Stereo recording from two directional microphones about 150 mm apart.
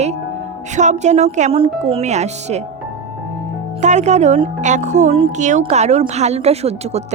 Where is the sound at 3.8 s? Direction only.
50° right (ahead or behind).